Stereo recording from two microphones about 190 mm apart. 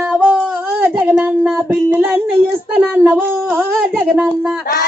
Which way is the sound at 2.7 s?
Centre (ahead or behind).